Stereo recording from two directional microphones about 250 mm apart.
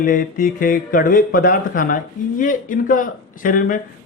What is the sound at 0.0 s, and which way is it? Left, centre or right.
Speech, left.